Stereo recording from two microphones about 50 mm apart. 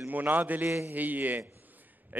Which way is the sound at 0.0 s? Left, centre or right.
Right.